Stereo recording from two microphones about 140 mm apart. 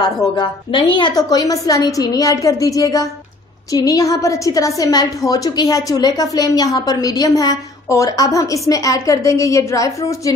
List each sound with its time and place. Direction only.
0.0 s a woman's voice: 35° left (ahead or behind)